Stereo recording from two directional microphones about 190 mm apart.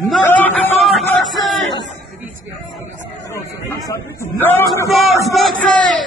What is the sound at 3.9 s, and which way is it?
Speech, 10° left (ahead or behind).